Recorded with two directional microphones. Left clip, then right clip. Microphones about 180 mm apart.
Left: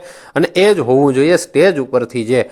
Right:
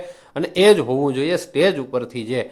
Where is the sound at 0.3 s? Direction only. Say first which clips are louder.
Left 3 dB; 45° left (ahead or behind).